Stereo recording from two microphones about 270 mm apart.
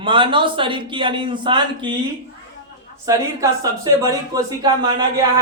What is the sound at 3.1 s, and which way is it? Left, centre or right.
A man's voice, centre.